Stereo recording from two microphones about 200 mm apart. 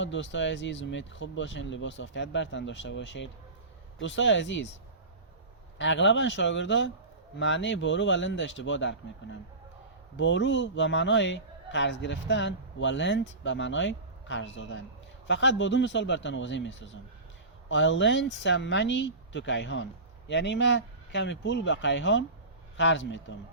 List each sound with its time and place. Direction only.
0.0 s a man's voice: 65° left (ahead or behind)
5.7 s a man's voice: 65° left (ahead or behind)